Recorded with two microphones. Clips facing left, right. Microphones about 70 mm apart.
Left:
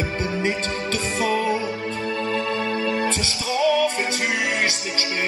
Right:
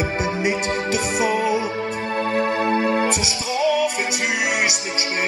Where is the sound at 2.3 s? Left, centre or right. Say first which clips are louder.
Right 7 dB; right.